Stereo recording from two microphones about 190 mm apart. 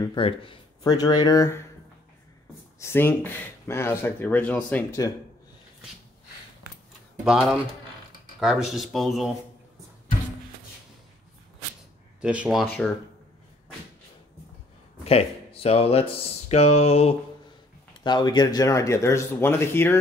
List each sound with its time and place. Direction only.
0.0 s speech: 25° left (ahead or behind)
2.8 s speech: 10° left (ahead or behind)
7.2 s speech: 5° right (ahead or behind)
12.2 s speech: 5° right (ahead or behind)
15.0 s speech: 30° left (ahead or behind)
18.0 s speech: 25° left (ahead or behind)